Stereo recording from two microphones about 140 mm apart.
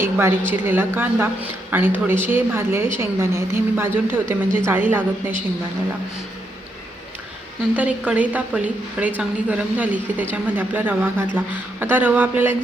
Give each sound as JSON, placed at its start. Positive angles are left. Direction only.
{"t": 0.0, "sound": "a woman's voice", "side_deg": -15}
{"t": 7.8, "sound": "a woman's voice", "side_deg": -10}